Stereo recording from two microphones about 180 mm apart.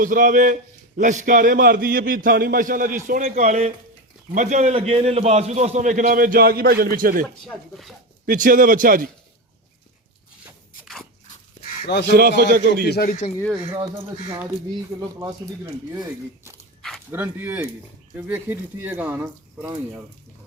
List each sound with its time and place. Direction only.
0.0 s a man's voice: 50° right (ahead or behind)
7.4 s speech: centre (ahead or behind)
8.3 s a man's voice: 50° right (ahead or behind)
11.9 s a man's voice: 70° left (ahead or behind)
12.4 s a man's voice: 65° right (ahead or behind)
12.8 s a man's voice: 60° left (ahead or behind)
13.7 s speech: 30° right (ahead or behind)
15.2 s speech: 15° right (ahead or behind)